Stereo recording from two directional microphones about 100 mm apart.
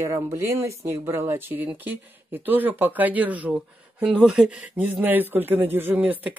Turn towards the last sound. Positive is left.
turn(degrees=-15)  # may be behind; listen again after turning